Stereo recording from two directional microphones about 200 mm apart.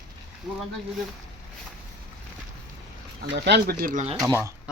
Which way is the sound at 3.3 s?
55° right (ahead or behind).